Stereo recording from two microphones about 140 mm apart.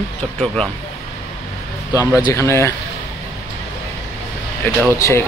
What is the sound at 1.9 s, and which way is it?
Speech, 20° left (ahead or behind).